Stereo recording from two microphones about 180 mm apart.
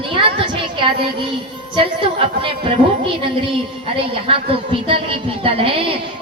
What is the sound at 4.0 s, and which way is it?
A woman's voice, 30° right (ahead or behind).